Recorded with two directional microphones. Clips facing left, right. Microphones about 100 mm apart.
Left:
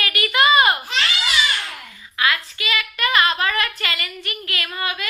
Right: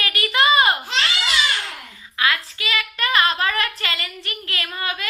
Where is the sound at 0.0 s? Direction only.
30° right (ahead or behind).